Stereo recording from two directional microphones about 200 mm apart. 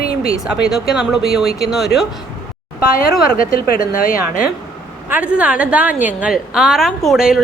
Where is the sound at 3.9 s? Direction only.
45° left (ahead or behind).